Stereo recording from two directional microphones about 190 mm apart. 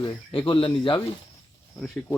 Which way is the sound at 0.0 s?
30° left (ahead or behind).